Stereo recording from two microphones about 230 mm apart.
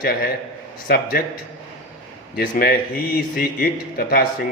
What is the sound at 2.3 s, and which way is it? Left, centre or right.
Speech, left.